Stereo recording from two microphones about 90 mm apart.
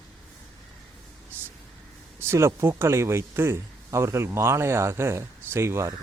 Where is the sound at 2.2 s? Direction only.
30° right (ahead or behind).